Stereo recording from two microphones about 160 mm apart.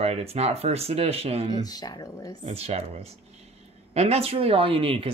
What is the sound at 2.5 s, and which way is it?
Speech, 40° right (ahead or behind).